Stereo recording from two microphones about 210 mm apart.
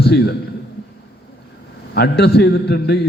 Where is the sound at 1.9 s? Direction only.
50° left (ahead or behind).